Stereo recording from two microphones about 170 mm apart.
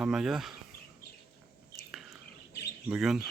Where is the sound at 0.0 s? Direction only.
5° right (ahead or behind).